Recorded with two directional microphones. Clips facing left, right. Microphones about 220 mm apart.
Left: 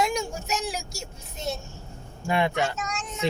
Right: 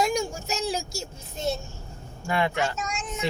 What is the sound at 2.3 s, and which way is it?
Speech, 20° left (ahead or behind).